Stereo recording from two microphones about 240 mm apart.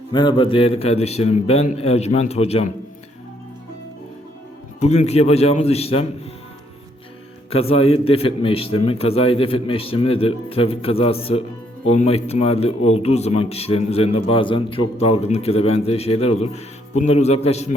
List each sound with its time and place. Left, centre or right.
0.1 s speech: centre
4.8 s speech: left
7.5 s speech: left